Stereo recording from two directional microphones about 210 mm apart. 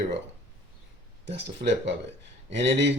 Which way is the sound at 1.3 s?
55° right (ahead or behind).